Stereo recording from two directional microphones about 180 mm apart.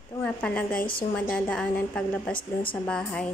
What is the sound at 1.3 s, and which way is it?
A woman's voice, 5° left (ahead or behind).